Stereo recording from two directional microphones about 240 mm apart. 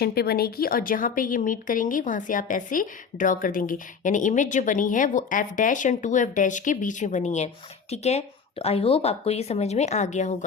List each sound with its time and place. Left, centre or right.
0.0 s a woman's voice: left